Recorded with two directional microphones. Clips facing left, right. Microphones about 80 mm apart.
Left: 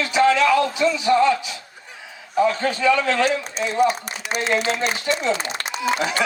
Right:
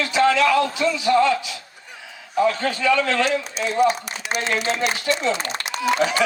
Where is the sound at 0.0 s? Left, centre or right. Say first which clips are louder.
Left 1 dB; left.